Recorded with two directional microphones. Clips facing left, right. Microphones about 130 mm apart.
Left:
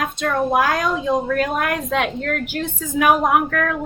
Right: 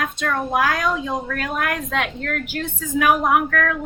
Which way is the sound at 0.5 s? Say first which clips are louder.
Left 2 dB; 25° left (ahead or behind).